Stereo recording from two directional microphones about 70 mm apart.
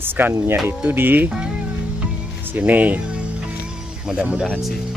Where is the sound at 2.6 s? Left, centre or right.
Right.